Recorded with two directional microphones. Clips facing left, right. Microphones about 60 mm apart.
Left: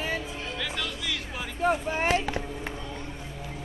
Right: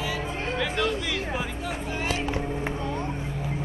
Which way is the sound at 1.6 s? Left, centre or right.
Left.